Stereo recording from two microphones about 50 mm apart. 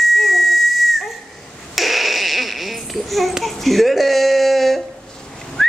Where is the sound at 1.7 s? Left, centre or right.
Centre.